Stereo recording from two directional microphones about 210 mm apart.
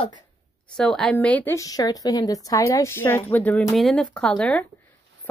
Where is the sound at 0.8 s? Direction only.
5° left (ahead or behind).